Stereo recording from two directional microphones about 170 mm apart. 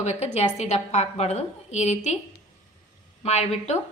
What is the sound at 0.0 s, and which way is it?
A woman's voice, 40° left (ahead or behind).